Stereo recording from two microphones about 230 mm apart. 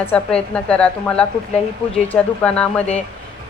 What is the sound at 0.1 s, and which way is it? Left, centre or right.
A woman's voice, centre.